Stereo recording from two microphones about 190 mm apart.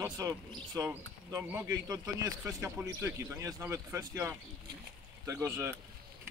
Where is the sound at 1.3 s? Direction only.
10° right (ahead or behind).